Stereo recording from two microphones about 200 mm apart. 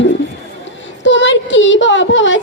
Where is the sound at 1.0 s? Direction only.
65° left (ahead or behind).